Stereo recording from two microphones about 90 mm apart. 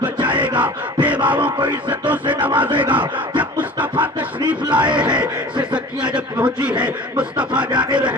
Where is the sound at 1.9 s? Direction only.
20° right (ahead or behind).